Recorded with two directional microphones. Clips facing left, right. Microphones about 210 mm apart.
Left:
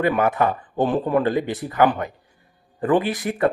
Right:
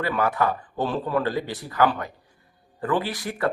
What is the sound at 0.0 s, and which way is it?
Speech, 20° left (ahead or behind).